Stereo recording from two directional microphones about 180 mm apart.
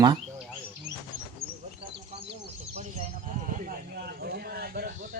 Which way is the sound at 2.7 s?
45° right (ahead or behind).